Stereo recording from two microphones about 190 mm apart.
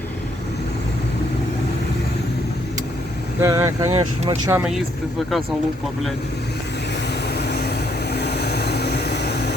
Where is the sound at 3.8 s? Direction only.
35° right (ahead or behind).